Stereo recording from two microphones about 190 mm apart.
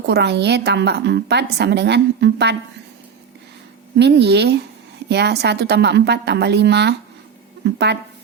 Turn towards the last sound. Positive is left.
turn(degrees=-65)  # may be behind; listen again after turning